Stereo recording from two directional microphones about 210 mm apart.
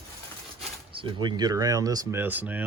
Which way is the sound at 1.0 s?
20° right (ahead or behind).